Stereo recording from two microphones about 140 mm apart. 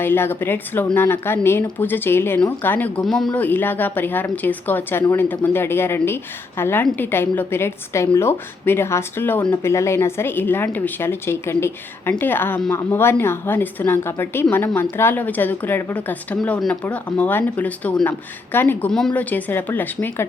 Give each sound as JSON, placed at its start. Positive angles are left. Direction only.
{"t": 0.0, "sound": "a woman's voice", "side_deg": 15}
{"t": 3.1, "sound": "speech", "side_deg": 0}
{"t": 3.4, "sound": "a woman's voice", "side_deg": 15}
{"t": 18.9, "sound": "a woman's voice", "side_deg": 5}